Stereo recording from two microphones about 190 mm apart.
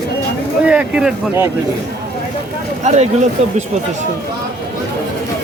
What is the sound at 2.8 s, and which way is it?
Speech, 35° right (ahead or behind).